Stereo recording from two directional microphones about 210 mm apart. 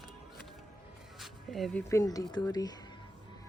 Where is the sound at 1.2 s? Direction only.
Centre (ahead or behind).